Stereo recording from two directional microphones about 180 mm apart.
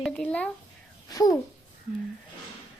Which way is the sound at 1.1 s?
20° left (ahead or behind).